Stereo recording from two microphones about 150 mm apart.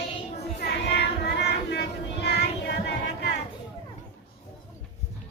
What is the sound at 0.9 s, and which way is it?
Child singing, 90° left.